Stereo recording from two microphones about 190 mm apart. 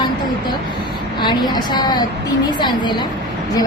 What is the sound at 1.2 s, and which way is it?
A woman's voice, 25° left (ahead or behind).